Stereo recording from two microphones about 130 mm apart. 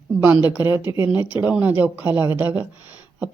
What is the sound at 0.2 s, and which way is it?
Speech, 15° right (ahead or behind).